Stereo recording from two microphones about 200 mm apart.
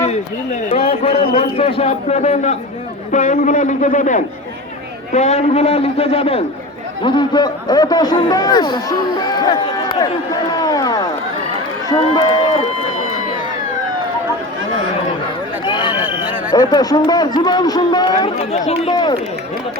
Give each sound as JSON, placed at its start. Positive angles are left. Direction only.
{"t": 0.7, "sound": "a man's voice", "side_deg": 30}
{"t": 10.6, "sound": "a sound", "side_deg": 20}
{"t": 11.9, "sound": "speech", "side_deg": 20}
{"t": 15.6, "sound": "a sound", "side_deg": 25}
{"t": 16.0, "sound": "neigh", "side_deg": -10}
{"t": 16.5, "sound": "a man's voice", "side_deg": 20}
{"t": 18.5, "sound": "a man's voice", "side_deg": 35}
{"t": 18.9, "sound": "a man's voice", "side_deg": 20}